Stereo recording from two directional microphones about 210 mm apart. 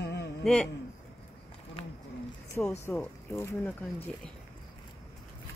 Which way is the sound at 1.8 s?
30° left (ahead or behind).